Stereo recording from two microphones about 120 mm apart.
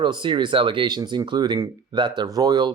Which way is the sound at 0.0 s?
40° right (ahead or behind).